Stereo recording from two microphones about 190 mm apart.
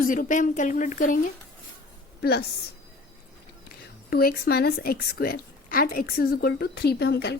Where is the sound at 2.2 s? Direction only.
55° left (ahead or behind).